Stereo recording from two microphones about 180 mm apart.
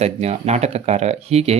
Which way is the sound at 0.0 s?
35° right (ahead or behind).